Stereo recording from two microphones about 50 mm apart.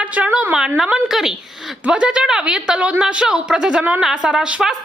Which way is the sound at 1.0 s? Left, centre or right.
Centre.